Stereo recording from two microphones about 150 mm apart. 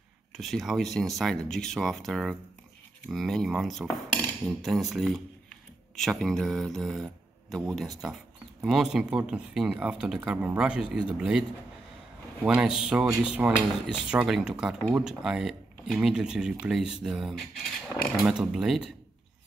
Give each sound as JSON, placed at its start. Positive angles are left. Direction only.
{"t": 0.4, "sound": "speech", "side_deg": 0}
{"t": 12.4, "sound": "speech", "side_deg": -5}